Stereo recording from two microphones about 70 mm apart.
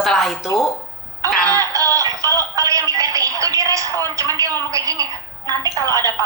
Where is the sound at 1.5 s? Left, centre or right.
Right.